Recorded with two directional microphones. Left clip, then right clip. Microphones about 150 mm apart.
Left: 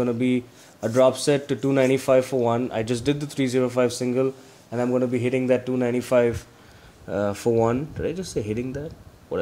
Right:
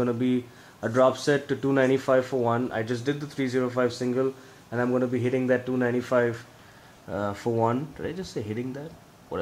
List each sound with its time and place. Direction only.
0.0 s speech: 10° left (ahead or behind)